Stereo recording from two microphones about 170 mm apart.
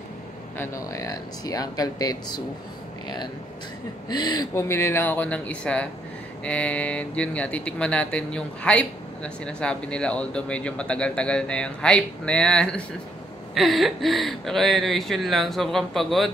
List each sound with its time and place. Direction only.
0.6 s speech: 20° left (ahead or behind)
4.1 s speech: 25° left (ahead or behind); by 16.3 s centre (ahead or behind)